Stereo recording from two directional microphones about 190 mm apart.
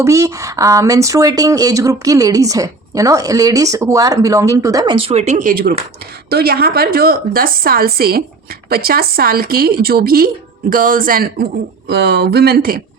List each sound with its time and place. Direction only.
0.0 s a woman's voice: 15° right (ahead or behind); by 12.8 s 55° right (ahead or behind)